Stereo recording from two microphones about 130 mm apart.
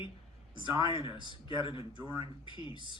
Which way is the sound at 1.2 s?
40° left (ahead or behind).